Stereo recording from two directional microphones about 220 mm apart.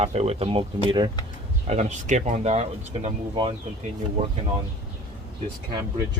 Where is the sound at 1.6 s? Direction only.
30° right (ahead or behind).